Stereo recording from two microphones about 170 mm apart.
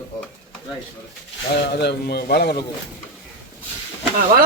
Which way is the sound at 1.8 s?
70° left (ahead or behind).